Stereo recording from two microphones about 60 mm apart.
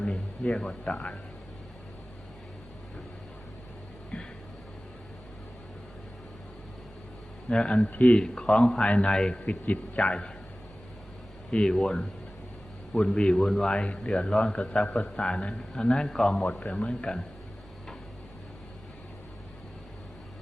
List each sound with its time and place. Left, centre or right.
0.0 s speech: centre
4.1 s a sound: centre
7.5 s speech: centre
11.5 s speech: centre
13.7 s speech: centre